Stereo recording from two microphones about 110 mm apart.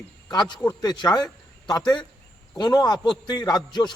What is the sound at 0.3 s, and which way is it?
A man's voice, 40° left (ahead or behind).